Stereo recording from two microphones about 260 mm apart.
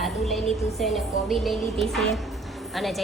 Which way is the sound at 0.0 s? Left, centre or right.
Centre.